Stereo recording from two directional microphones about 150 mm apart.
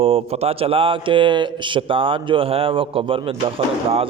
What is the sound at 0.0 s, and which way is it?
A man's voice, 40° right (ahead or behind).